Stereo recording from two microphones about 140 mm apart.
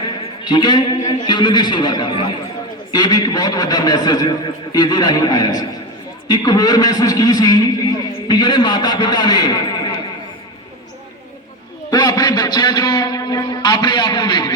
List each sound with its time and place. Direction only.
0.4 s a man's voice: 30° left (ahead or behind)
11.9 s a man's voice: 25° left (ahead or behind)